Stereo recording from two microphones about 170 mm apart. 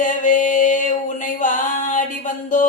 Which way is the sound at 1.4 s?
50° left (ahead or behind).